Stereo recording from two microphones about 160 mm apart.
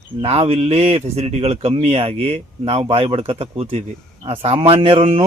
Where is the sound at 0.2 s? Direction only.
40° right (ahead or behind).